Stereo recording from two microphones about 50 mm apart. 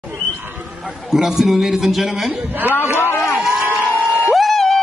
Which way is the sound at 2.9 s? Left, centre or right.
Left.